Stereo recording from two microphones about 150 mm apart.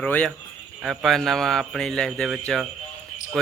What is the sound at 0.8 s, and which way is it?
A man's voice, centre (ahead or behind).